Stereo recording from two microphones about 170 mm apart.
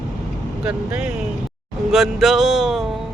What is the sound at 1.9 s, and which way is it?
Speech, centre (ahead or behind).